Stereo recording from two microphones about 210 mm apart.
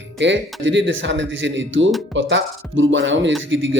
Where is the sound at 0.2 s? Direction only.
60° right (ahead or behind).